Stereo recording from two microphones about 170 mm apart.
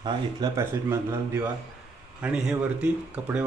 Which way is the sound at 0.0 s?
20° right (ahead or behind).